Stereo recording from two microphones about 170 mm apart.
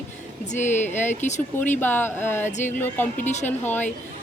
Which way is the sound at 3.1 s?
45° left (ahead or behind).